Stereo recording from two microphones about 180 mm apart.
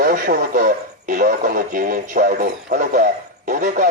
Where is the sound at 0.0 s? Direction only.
50° right (ahead or behind).